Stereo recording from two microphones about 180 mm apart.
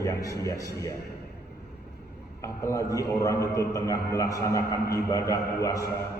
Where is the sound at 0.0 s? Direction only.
20° left (ahead or behind).